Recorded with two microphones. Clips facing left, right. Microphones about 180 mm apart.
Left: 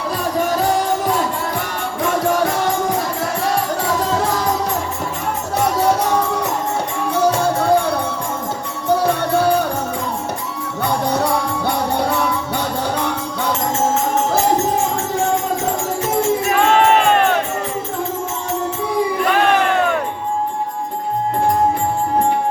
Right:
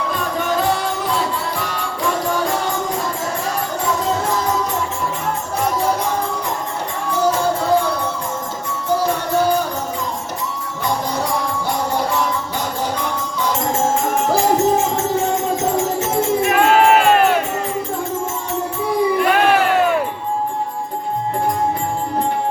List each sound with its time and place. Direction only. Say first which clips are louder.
0.3 s music: left 2 dB; 40° left (ahead or behind)
5.7 s music: left 5 dB; 70° left (ahead or behind)
10.8 s music: left 3 dB; 65° left (ahead or behind)
16.7 s crowd: right 1 dB; 10° right (ahead or behind)